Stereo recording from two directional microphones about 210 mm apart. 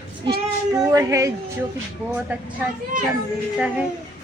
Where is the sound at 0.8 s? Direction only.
15° right (ahead or behind).